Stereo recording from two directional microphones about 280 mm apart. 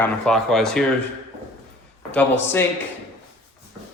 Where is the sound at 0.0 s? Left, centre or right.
Centre.